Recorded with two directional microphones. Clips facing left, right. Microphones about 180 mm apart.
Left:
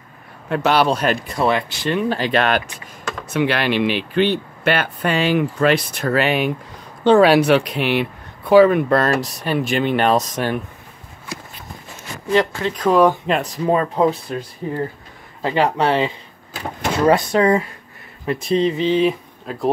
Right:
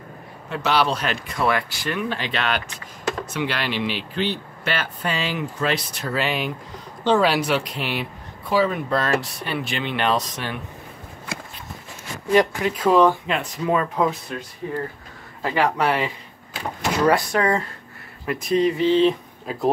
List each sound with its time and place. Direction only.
0.5 s speech: 55° left (ahead or behind); by 2.0 s 25° left (ahead or behind)
2.0 s speech: 40° left (ahead or behind); by 9.1 s 60° left (ahead or behind)
9.2 s speech: 40° left (ahead or behind)
12.4 s speech: 15° right (ahead or behind)
13.3 s speech: 35° left (ahead or behind)
15.4 s speech: 25° left (ahead or behind)
19.5 s speech: 5° right (ahead or behind)